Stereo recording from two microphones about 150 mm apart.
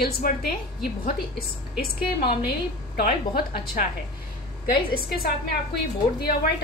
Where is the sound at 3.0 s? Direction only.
80° left.